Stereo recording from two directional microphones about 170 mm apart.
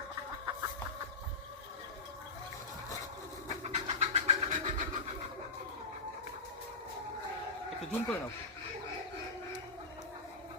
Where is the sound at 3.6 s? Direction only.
35° right (ahead or behind).